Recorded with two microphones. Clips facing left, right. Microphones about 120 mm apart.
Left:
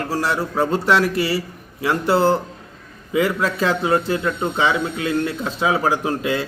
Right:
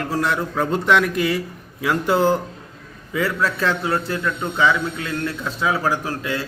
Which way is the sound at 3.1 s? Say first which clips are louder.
Left 3 dB; 15° left (ahead or behind).